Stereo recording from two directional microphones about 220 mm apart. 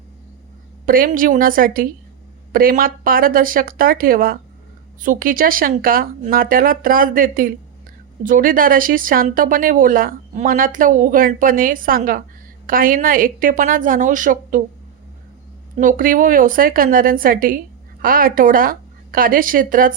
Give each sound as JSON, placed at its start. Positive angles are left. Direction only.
{"t": 0.9, "sound": "speech", "side_deg": -40}
{"t": 15.8, "sound": "a woman's voice", "side_deg": -40}